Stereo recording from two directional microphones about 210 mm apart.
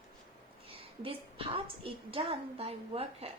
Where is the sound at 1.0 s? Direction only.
25° right (ahead or behind).